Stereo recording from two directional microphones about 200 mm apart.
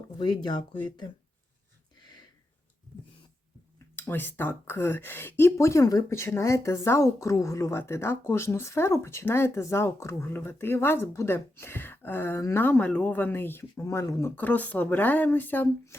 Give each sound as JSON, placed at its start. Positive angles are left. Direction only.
{"t": 0.2, "sound": "speech", "side_deg": 20}
{"t": 0.7, "sound": "speech", "side_deg": 5}
{"t": 3.9, "sound": "speech", "side_deg": 10}